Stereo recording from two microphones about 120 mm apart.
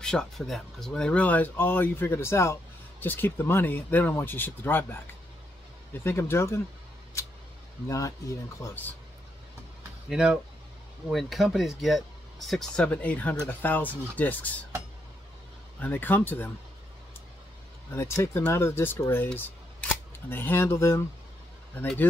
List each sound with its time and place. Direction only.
0.0 s speech: 5° left (ahead or behind)
6.0 s speech: 20° left (ahead or behind)
8.6 s speech: 15° left (ahead or behind)
10.0 s speech: 5° right (ahead or behind); by 14.6 s 15° left (ahead or behind)
15.8 s speech: 15° left (ahead or behind)
17.9 s speech: 25° left (ahead or behind)